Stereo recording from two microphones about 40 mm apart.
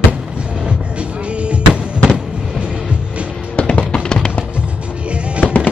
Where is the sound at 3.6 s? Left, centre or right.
Left.